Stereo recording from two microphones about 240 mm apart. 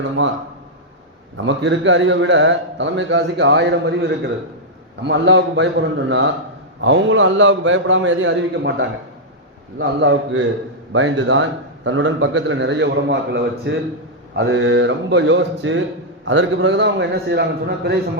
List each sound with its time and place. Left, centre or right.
1.5 s a man's voice: right